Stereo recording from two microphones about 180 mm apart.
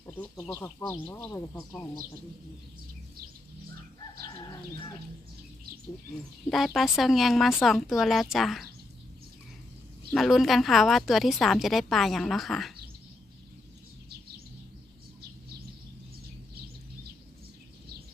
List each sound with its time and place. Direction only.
0.0 s bird: 15° left (ahead or behind)
0.4 s speech: 10° left (ahead or behind)
6.5 s a woman's voice: centre (ahead or behind)
10.1 s a woman's voice: centre (ahead or behind)